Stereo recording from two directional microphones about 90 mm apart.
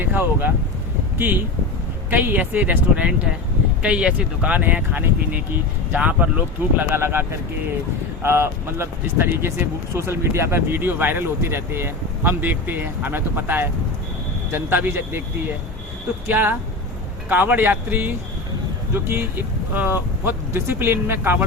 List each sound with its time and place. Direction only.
0.0 s speech: 20° right (ahead or behind)
2.0 s speech: 20° right (ahead or behind)
16.2 s speech: 25° right (ahead or behind)